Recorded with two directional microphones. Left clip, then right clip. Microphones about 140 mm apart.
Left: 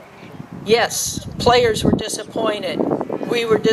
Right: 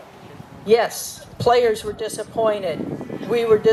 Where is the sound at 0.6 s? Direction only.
20° left (ahead or behind).